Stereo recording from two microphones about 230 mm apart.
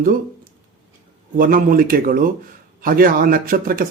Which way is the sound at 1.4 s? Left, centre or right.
Right.